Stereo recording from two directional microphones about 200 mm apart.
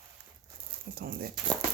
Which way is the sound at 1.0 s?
50° right (ahead or behind).